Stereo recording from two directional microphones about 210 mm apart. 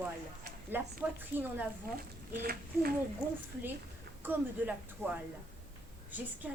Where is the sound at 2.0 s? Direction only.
45° right (ahead or behind).